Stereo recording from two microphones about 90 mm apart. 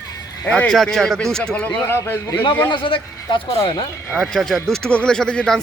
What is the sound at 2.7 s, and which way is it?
Speech, 70° left (ahead or behind).